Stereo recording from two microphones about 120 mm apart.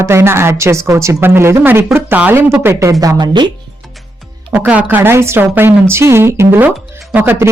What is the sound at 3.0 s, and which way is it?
Speech, 35° right (ahead or behind).